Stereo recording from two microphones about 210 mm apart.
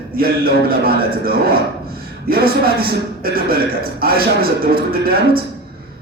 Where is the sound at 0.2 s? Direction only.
45° right (ahead or behind).